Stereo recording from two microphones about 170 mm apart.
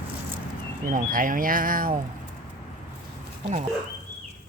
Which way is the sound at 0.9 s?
55° right (ahead or behind).